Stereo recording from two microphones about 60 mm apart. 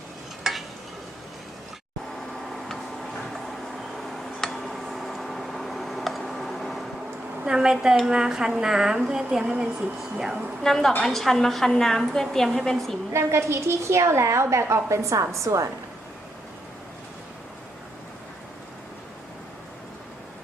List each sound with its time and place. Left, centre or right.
0.4 s stir: centre
2.5 s tick-tock: centre
3.9 s a sound: centre
7.4 s speech: centre
8.0 s dishes: centre
10.6 s speech: centre
13.1 s a woman's voice: right